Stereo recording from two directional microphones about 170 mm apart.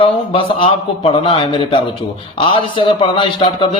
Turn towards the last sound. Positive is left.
turn(degrees=30)  # may be behind; listen again after turning